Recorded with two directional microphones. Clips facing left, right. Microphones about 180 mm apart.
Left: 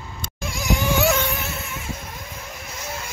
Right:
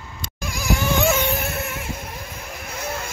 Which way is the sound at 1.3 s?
55° right (ahead or behind).